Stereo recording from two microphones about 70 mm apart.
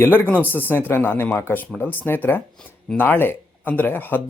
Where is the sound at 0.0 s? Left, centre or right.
Left.